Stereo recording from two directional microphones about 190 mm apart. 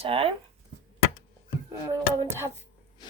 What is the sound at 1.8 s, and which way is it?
Speech, 15° right (ahead or behind).